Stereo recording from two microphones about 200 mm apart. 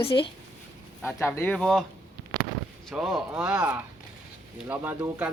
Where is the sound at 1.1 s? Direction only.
10° left (ahead or behind).